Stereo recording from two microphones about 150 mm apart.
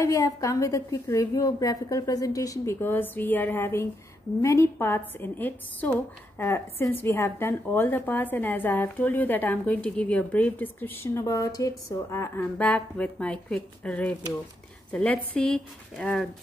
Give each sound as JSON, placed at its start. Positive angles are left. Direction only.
{"t": 0.0, "sound": "a woman's voice", "side_deg": 20}